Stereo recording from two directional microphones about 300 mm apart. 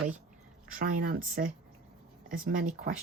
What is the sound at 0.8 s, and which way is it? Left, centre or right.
A woman's voice, right.